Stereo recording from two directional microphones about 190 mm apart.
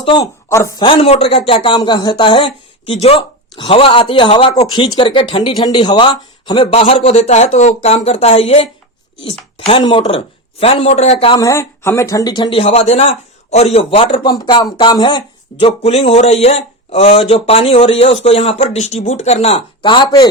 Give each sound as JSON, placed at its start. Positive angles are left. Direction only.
{"t": 0.0, "sound": "a man's voice", "side_deg": 25}
{"t": 0.9, "sound": "speech", "side_deg": 30}
{"t": 11.3, "sound": "speech", "side_deg": 15}